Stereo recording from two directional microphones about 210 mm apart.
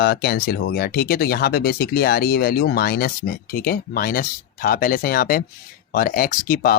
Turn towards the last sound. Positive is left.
turn(degrees=45)  # may be behind; listen again after turning